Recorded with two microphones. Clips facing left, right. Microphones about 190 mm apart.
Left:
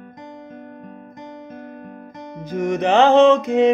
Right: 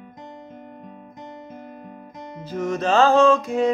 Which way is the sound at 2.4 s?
15° left (ahead or behind).